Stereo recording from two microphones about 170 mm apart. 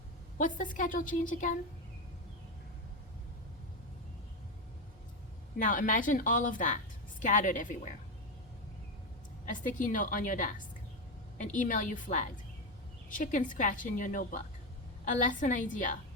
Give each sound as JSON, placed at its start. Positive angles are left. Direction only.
{"t": 0.3, "sound": "a woman's voice", "side_deg": 50}
{"t": 5.5, "sound": "a woman's voice", "side_deg": 50}
{"t": 9.5, "sound": "a woman's voice", "side_deg": 50}